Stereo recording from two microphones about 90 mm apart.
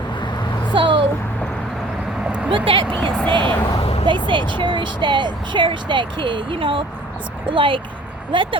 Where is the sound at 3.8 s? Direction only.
90° left.